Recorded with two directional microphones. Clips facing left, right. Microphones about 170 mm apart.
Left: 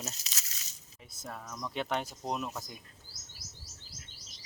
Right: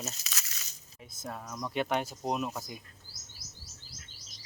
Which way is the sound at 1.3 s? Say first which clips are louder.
Right 3 dB; 15° right (ahead or behind).